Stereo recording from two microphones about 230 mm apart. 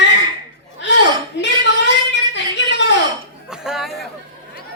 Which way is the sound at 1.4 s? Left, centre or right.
Left.